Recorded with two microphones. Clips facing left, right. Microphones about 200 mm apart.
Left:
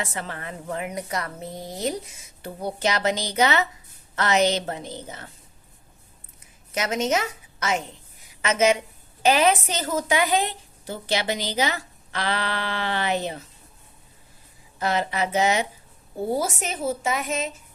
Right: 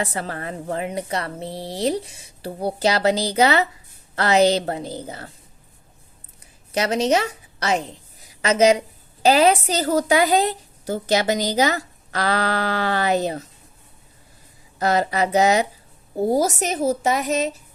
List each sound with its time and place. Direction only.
0.0 s a woman's voice: 35° right (ahead or behind)
6.7 s a woman's voice: 35° right (ahead or behind)
14.8 s a woman's voice: 40° right (ahead or behind)